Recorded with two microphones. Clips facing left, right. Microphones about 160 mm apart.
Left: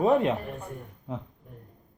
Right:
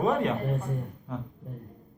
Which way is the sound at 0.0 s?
25° left (ahead or behind).